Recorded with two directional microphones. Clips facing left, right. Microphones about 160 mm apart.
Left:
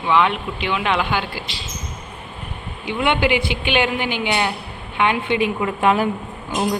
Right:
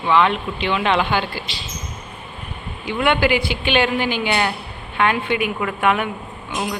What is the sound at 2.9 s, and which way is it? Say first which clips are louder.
Speech: right 1 dB; 20° left (ahead or behind).